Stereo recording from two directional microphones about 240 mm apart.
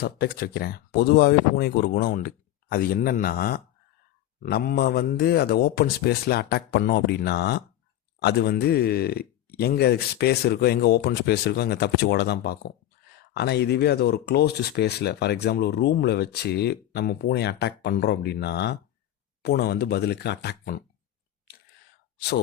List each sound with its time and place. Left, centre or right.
0.0 s a man's voice: left